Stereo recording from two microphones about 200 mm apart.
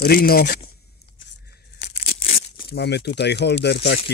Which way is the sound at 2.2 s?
30° left (ahead or behind).